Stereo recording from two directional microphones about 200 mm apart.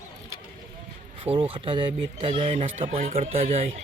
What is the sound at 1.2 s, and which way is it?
Speech, 25° right (ahead or behind).